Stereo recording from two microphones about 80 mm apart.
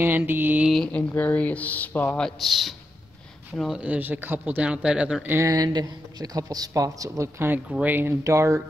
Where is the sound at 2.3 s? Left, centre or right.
Centre.